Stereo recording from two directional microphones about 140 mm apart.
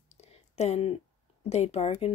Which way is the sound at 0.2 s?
50° left (ahead or behind).